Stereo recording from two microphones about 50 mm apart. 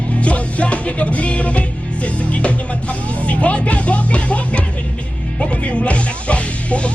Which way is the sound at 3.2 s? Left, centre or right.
Left.